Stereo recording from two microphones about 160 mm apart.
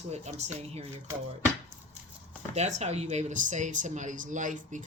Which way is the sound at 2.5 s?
45° right (ahead or behind).